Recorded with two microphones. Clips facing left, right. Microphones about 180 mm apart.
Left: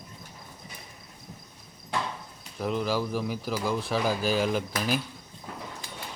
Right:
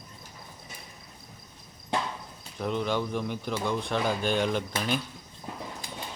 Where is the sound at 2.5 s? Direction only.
5° left (ahead or behind).